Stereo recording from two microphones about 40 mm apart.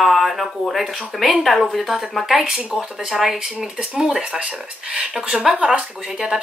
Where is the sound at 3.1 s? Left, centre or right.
Centre.